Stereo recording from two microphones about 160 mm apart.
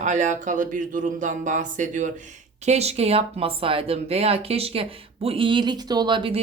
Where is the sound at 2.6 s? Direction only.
40° right (ahead or behind).